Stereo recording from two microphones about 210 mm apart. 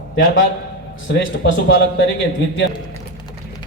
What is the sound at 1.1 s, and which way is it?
Speech, 65° left (ahead or behind).